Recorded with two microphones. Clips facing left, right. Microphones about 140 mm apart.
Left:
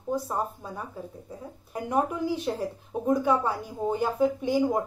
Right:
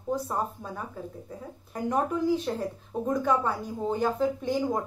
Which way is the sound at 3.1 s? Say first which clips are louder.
Left 2 dB; 5° left (ahead or behind).